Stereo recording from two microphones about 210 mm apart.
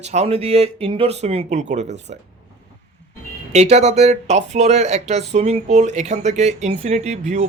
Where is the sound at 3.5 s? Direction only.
30° right (ahead or behind).